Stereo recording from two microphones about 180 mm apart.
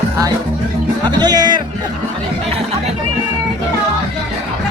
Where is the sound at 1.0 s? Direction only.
25° right (ahead or behind).